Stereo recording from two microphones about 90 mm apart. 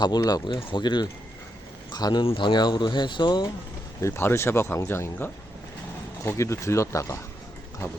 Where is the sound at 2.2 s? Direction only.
90° left.